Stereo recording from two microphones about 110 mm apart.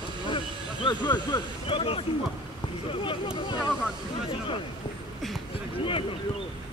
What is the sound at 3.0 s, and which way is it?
Speech, 45° left (ahead or behind).